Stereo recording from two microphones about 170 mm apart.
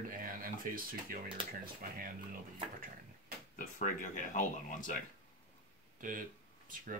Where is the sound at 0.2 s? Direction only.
55° right (ahead or behind).